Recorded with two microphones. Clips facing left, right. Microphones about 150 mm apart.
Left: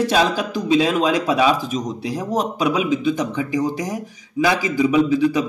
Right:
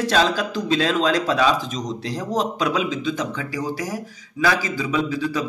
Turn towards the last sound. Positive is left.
turn(degrees=15)  # may be behind; listen again after turning